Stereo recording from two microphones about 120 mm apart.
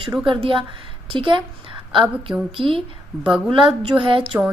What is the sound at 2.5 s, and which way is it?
Speech, 50° right (ahead or behind).